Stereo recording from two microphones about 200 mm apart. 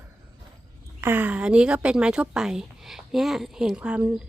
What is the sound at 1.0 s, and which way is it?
A woman's voice, 10° right (ahead or behind).